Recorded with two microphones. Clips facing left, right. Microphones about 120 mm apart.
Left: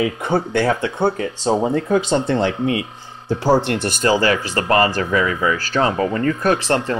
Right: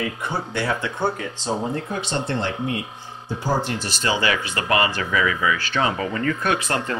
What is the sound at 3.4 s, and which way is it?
Speech, 65° left (ahead or behind).